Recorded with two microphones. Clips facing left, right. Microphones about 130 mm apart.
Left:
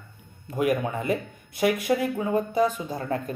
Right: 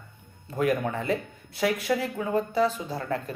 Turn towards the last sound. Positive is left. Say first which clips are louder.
# left 2 dB
turn(degrees=20)  # may be behind; listen again after turning